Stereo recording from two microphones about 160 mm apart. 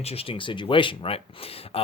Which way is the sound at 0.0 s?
40° left (ahead or behind).